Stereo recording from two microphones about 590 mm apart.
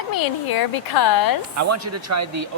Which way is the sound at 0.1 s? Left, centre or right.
Left.